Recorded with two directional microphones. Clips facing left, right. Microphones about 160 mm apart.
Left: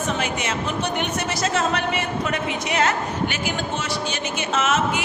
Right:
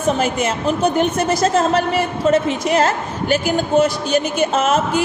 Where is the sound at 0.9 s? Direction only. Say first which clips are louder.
Right 8 dB; 50° right (ahead or behind).